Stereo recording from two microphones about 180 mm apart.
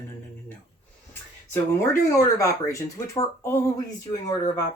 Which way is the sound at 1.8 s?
15° left (ahead or behind).